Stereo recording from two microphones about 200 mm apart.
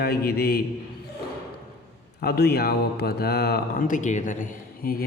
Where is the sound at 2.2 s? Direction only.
55° left (ahead or behind).